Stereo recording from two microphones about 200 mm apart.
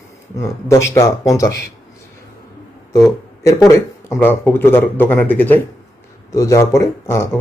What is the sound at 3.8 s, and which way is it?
Speech, 10° left (ahead or behind).